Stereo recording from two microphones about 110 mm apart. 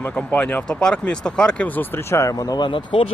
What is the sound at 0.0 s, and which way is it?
Speech, 10° left (ahead or behind).